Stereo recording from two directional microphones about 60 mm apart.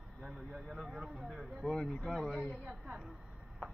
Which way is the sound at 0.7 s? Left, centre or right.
Centre.